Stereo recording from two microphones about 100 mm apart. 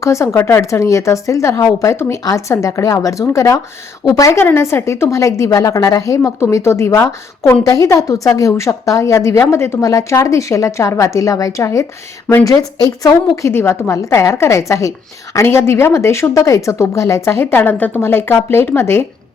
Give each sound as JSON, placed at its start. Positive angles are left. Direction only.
{"t": 0.0, "sound": "a woman's voice", "side_deg": 30}
{"t": 13.5, "sound": "a woman's voice", "side_deg": 25}